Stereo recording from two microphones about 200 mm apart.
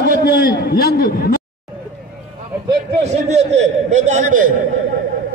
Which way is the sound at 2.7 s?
35° right (ahead or behind).